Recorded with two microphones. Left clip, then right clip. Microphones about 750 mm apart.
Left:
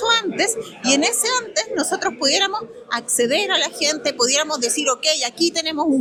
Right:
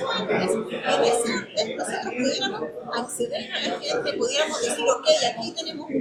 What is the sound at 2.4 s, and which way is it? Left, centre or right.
A woman's voice, left.